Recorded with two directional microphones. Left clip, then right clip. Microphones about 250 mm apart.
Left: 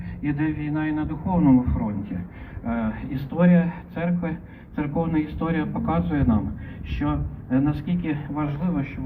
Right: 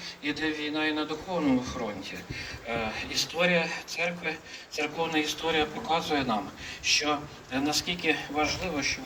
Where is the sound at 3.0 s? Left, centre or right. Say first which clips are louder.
Left 1 dB; centre.